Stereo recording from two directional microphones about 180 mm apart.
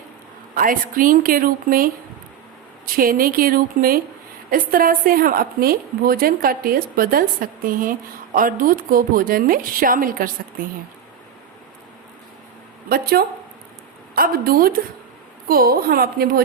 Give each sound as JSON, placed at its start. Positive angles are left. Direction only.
{"t": 0.5, "sound": "a woman's voice", "side_deg": -50}
{"t": 12.9, "sound": "a woman's voice", "side_deg": -60}